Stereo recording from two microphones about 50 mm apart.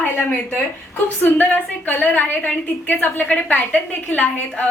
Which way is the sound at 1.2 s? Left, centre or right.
Left.